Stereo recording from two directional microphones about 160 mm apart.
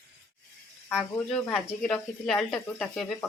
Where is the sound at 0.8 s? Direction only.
5° left (ahead or behind).